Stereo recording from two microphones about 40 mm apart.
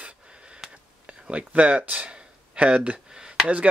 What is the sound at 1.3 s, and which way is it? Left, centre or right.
Speech, right.